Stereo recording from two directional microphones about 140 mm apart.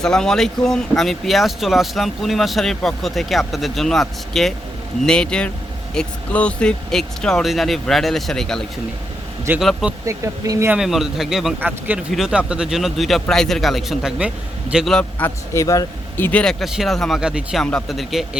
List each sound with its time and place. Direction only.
0.0 s speech: 5° left (ahead or behind)
10.1 s speech: 25° right (ahead or behind)
10.7 s speech: 5° right (ahead or behind)
15.2 s speech: 20° left (ahead or behind); by 18.3 s centre (ahead or behind)